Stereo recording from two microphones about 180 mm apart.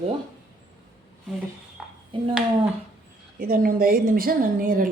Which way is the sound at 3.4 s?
55° right (ahead or behind).